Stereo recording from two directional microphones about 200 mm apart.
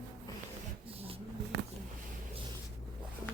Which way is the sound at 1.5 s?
55° right (ahead or behind).